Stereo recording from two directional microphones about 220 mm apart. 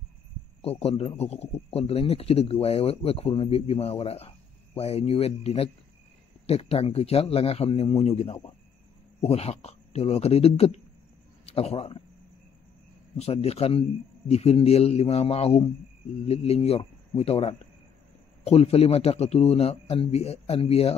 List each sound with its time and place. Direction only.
0.6 s a man's voice: 25° left (ahead or behind)
13.2 s a man's voice: 25° left (ahead or behind)